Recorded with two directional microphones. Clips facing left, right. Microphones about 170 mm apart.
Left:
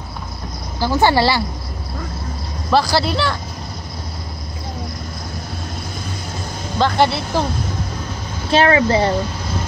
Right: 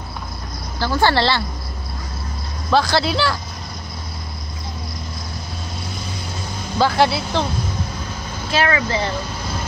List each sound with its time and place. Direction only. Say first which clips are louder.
0.7 s a woman's voice: left 3 dB; 15° left (ahead or behind)
2.7 s speech: left 1 dB; centre (ahead or behind)
6.8 s speech: even; centre (ahead or behind)
8.5 s speech: left 6 dB; 30° left (ahead or behind)